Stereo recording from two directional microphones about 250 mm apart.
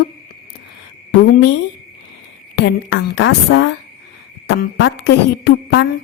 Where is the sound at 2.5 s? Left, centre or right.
Left.